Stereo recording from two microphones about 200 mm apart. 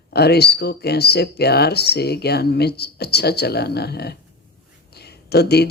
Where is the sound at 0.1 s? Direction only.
55° left (ahead or behind).